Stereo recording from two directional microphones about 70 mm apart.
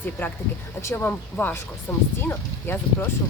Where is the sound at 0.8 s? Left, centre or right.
Left.